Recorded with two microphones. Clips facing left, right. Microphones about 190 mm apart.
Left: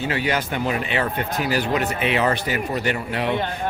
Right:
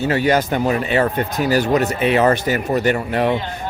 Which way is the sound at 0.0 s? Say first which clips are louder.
Right 7 dB; 45° right (ahead or behind).